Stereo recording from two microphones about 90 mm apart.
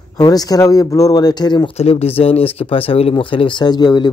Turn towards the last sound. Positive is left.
turn(degrees=50)  # may be behind; listen again after turning